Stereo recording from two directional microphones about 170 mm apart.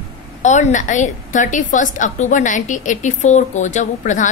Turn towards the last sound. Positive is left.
turn(degrees=45)  # may be behind; listen again after turning